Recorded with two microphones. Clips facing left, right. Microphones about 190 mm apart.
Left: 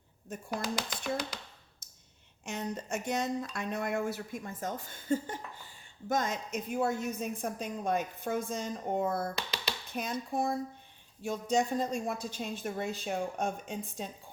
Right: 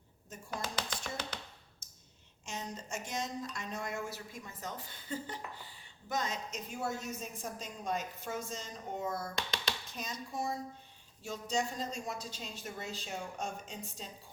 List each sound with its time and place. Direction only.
0.5 s speech: 10° left (ahead or behind)
2.4 s speech: 60° left (ahead or behind)
9.3 s speech: 5° left (ahead or behind)
9.9 s speech: 60° left (ahead or behind)